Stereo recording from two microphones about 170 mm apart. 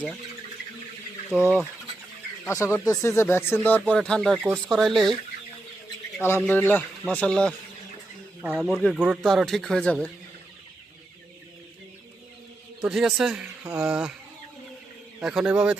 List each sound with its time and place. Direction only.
1.3 s speech: 5° right (ahead or behind)
2.5 s speech: 15° left (ahead or behind)
6.4 s speech: 10° left (ahead or behind)
8.4 s speech: 5° right (ahead or behind)
12.8 s speech: 5° right (ahead or behind)
15.2 s speech: 5° right (ahead or behind)